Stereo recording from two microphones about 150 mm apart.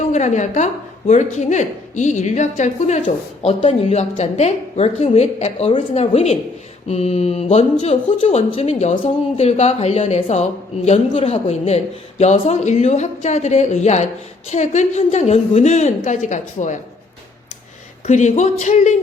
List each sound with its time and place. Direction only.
0.0 s speech: 50° left (ahead or behind)
18.0 s speech: 50° left (ahead or behind)